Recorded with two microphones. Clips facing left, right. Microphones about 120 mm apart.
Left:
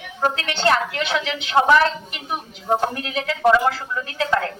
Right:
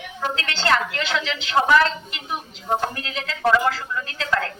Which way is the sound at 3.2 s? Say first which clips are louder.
Left 3 dB; 15° left (ahead or behind).